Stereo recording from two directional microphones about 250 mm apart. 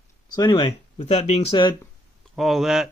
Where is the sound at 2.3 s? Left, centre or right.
Centre.